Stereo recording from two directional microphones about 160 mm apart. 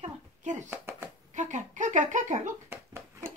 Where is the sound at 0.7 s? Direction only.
15° right (ahead or behind).